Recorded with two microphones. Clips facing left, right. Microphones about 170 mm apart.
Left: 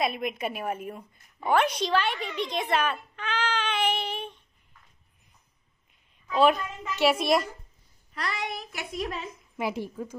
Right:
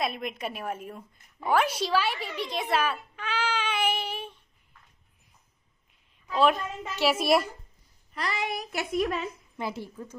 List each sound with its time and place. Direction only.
0.0 s a child's voice: centre (ahead or behind)
6.2 s a child's voice: centre (ahead or behind)
8.9 s a woman's voice: 55° right (ahead or behind)
9.6 s a woman's voice: 15° left (ahead or behind)